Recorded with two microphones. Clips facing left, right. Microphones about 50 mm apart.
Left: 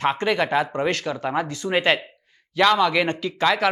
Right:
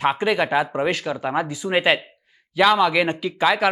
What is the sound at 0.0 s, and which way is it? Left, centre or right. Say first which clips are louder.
Speech: right 1 dB; centre.